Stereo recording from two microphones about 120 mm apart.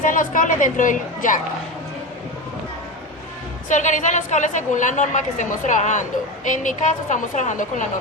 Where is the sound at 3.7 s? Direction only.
90° left.